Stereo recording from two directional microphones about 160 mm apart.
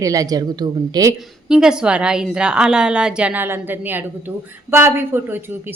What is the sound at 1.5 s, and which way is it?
A woman's voice, 5° right (ahead or behind).